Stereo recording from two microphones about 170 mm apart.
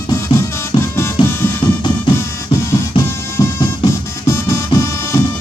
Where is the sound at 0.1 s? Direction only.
15° left (ahead or behind).